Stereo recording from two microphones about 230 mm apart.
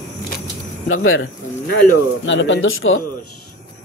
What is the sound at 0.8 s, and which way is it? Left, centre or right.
Speech, left.